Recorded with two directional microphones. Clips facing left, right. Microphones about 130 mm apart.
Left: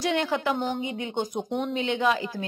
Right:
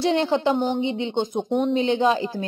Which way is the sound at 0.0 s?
30° right (ahead or behind).